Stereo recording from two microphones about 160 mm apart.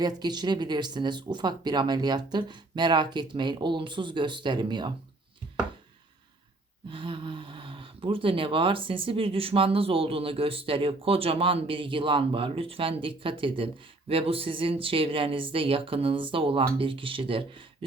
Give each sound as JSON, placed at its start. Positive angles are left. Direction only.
{"t": 0.0, "sound": "speech", "side_deg": -25}
{"t": 6.9, "sound": "speech", "side_deg": -30}